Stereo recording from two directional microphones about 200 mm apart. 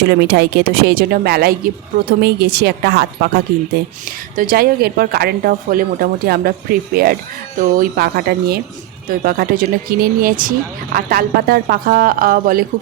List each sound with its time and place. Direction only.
0.1 s a woman's voice: 55° right (ahead or behind)